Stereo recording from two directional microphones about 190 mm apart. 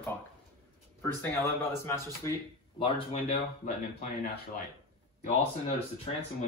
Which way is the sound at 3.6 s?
40° left (ahead or behind).